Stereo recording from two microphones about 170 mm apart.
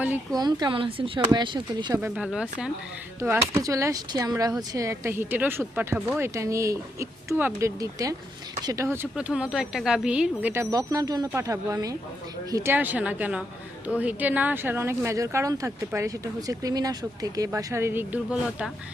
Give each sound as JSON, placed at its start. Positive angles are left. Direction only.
{"t": 0.3, "sound": "speech", "side_deg": -25}
{"t": 2.0, "sound": "speech", "side_deg": -10}
{"t": 3.2, "sound": "speech", "side_deg": -15}